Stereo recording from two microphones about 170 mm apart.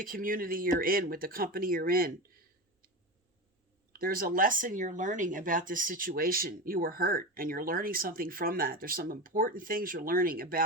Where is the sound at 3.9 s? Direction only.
60° right (ahead or behind).